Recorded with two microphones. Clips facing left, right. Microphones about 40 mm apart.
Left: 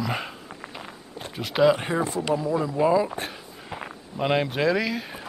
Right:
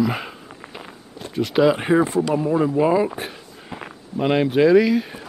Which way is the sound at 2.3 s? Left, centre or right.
Right.